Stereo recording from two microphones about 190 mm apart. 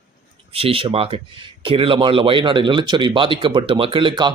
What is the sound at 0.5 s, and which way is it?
A man's voice, 30° right (ahead or behind).